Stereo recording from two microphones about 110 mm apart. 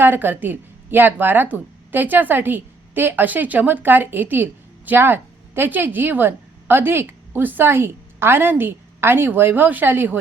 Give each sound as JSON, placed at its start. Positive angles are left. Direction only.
{"t": 0.0, "sound": "a woman's voice", "side_deg": -20}